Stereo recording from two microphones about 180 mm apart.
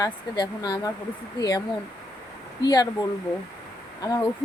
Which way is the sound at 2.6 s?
20° left (ahead or behind).